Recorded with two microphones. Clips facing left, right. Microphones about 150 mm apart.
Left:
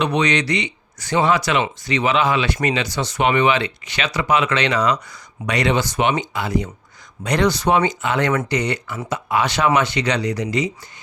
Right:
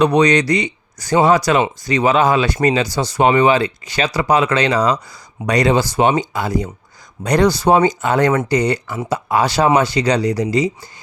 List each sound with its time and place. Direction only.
0.0 s speech: 40° right (ahead or behind)